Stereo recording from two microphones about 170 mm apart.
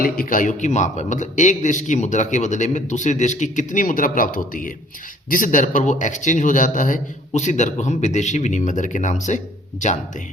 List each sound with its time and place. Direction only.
0.0 s a man's voice: 55° left (ahead or behind)